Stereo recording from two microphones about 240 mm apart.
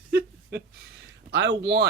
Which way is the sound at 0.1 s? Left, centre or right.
Right.